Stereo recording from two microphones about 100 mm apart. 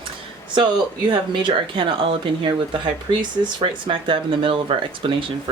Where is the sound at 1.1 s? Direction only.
55° right (ahead or behind).